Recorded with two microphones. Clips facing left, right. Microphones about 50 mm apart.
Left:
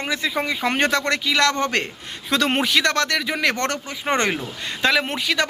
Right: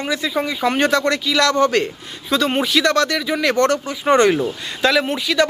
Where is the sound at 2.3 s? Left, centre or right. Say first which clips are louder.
Right 2 dB; left.